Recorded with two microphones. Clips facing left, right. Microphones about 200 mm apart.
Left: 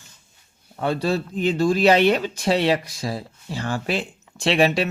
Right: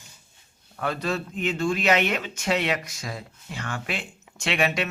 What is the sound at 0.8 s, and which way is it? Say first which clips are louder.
Speech: left 5 dB; 30° left (ahead or behind).